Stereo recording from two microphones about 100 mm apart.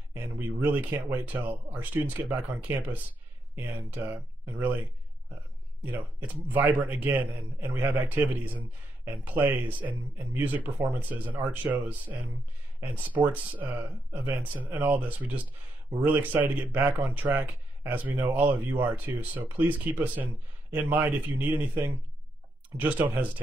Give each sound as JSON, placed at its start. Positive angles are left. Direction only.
{"t": 0.4, "sound": "speech", "side_deg": -20}
{"t": 4.1, "sound": "speech", "side_deg": -20}
{"t": 5.9, "sound": "speech", "side_deg": -15}